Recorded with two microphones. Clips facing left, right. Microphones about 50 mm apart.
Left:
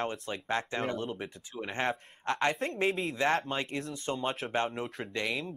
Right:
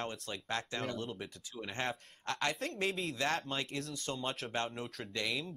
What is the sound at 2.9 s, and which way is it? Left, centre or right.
Speech, centre.